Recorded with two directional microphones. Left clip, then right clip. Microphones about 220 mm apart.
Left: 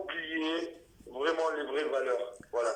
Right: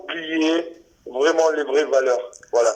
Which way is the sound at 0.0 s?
45° right (ahead or behind).